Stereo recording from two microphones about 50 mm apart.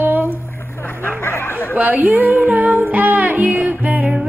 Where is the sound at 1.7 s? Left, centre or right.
Right.